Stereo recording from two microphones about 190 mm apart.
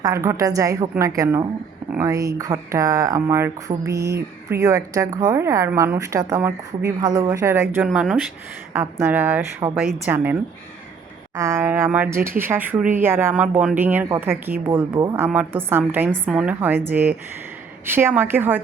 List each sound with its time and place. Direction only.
0.0 s speech: 15° right (ahead or behind)
11.3 s speech: 15° right (ahead or behind)